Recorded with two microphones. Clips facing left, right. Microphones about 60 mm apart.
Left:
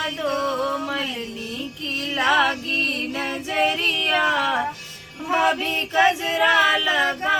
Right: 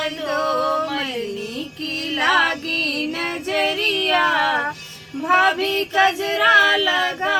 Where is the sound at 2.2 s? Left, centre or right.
Right.